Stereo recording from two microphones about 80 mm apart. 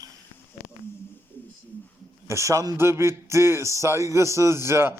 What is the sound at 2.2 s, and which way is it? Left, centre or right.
Speech, right.